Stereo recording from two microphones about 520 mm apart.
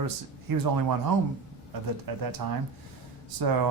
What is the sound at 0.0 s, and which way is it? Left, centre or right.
Speech, right.